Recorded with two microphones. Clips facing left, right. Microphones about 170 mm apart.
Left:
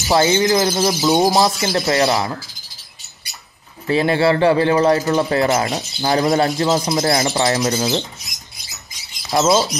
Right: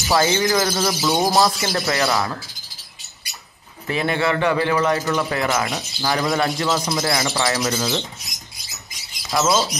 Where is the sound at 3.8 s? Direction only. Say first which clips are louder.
Left 6 dB; 30° left (ahead or behind).